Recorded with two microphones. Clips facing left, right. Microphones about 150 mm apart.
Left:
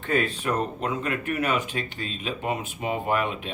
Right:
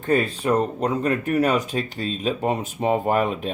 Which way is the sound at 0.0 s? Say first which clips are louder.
Right 4 dB; 40° right (ahead or behind).